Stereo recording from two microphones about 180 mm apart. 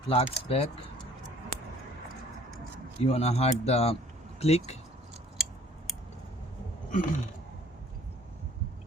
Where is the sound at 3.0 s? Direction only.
35° left (ahead or behind).